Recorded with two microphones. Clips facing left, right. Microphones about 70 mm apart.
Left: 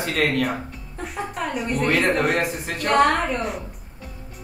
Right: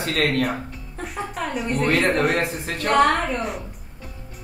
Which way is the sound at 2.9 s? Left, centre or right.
Centre.